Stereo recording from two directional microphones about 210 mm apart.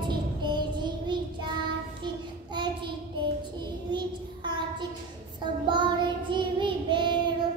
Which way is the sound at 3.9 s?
20° right (ahead or behind).